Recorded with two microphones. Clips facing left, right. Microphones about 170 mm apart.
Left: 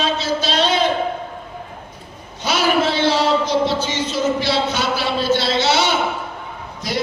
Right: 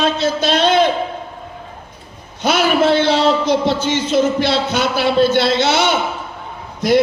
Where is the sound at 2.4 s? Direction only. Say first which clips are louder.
Right 3 dB; 55° right (ahead or behind).